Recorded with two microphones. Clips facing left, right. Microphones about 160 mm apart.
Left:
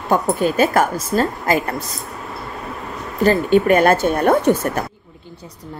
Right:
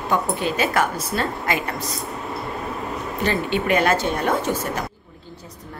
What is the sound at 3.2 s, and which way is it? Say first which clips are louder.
Speech: left 9 dB; 40° left (ahead or behind).